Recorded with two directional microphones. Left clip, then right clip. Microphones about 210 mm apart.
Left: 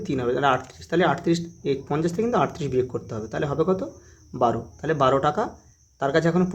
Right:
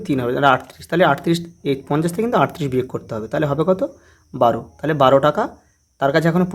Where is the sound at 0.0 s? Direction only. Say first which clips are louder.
Right 6 dB; 20° right (ahead or behind).